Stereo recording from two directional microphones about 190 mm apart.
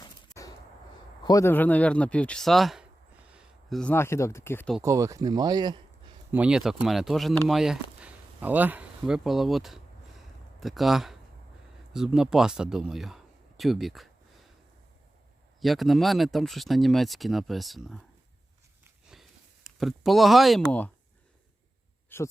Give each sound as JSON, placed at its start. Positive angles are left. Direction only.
{"t": 0.0, "sound": "a sound", "side_deg": 20}
{"t": 1.2, "sound": "speech", "side_deg": 20}
{"t": 4.8, "sound": "speech", "side_deg": -15}
{"t": 6.3, "sound": "speech", "side_deg": -5}
{"t": 15.6, "sound": "speech", "side_deg": 0}
{"t": 19.1, "sound": "a sound", "side_deg": 0}
{"t": 19.6, "sound": "speech", "side_deg": 0}
{"t": 22.1, "sound": "speech", "side_deg": 10}